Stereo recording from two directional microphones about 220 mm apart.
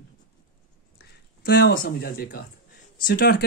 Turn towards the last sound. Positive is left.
turn(degrees=45)  # may be behind; listen again after turning